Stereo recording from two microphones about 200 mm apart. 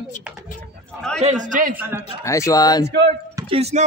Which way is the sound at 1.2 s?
35° right (ahead or behind).